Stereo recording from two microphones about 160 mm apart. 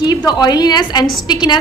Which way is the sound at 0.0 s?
20° left (ahead or behind).